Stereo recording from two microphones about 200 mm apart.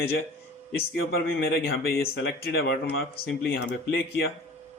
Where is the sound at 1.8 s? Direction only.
50° left (ahead or behind).